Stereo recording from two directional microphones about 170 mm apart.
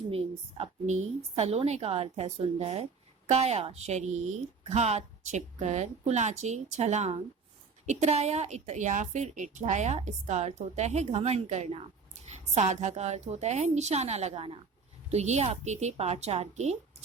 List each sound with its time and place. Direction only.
0.1 s a woman's voice: 35° right (ahead or behind)